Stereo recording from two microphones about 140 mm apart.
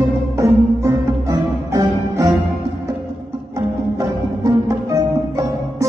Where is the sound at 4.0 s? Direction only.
25° right (ahead or behind).